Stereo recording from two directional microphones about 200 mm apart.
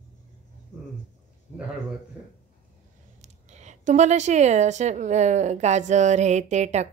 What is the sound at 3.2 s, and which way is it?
A woman's voice, 35° right (ahead or behind).